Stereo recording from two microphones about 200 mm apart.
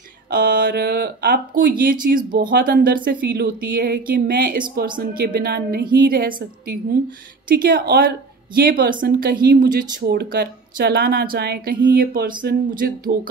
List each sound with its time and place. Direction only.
0.3 s speech: 45° right (ahead or behind)